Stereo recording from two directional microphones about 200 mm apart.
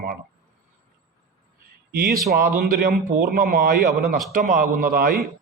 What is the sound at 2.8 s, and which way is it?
Speech, 50° right (ahead or behind).